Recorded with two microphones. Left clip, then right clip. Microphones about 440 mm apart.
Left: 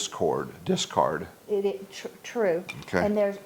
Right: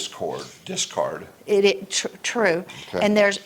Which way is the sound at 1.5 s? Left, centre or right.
Right.